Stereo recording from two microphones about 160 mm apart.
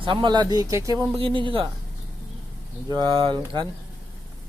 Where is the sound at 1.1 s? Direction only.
35° right (ahead or behind).